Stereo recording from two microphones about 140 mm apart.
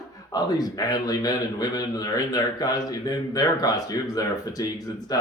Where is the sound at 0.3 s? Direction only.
30° left (ahead or behind).